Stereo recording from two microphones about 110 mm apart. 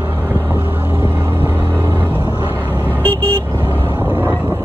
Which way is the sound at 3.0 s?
15° left (ahead or behind).